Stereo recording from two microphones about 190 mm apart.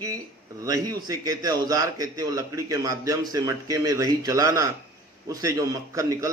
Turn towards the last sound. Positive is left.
turn(degrees=-15)  # may be behind; listen again after turning